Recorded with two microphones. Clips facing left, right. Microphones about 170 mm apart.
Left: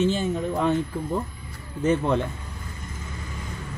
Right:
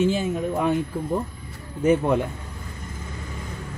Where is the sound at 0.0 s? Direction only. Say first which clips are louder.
Right 1 dB; 10° right (ahead or behind).